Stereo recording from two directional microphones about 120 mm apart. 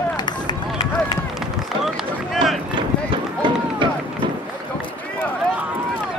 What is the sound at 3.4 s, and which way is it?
Run, 40° right (ahead or behind).